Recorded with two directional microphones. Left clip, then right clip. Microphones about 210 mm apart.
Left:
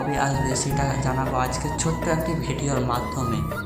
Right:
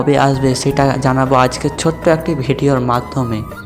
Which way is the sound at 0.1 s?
30° right (ahead or behind).